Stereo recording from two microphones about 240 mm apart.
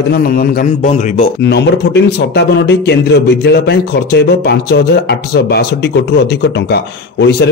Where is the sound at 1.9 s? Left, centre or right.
Left.